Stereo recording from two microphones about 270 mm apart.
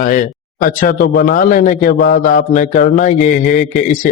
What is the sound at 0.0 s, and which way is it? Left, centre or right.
A man's voice, left.